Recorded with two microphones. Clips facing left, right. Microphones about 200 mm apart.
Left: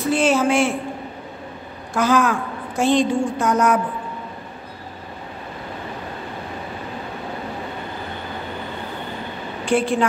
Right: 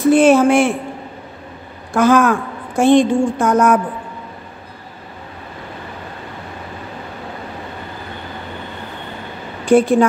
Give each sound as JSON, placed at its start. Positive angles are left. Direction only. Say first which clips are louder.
{"t": 0.1, "sound": "speech", "louder": "right 7 dB", "side_deg": -55}
{"t": 2.0, "sound": "a woman's voice", "louder": "right 5 dB", "side_deg": -50}
{"t": 9.7, "sound": "a woman's voice", "louder": "right 8 dB", "side_deg": -40}